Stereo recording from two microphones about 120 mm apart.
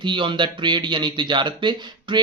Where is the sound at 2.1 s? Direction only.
40° right (ahead or behind).